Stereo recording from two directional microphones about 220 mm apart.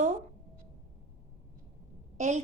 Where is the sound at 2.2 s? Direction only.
35° right (ahead or behind).